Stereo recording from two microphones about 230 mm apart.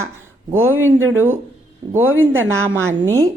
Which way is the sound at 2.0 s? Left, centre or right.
Right.